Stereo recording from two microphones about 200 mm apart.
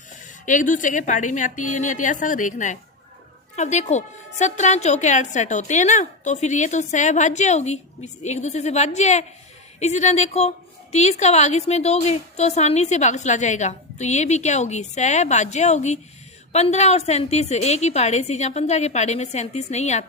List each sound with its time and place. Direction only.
0.4 s a woman's voice: 40° left (ahead or behind)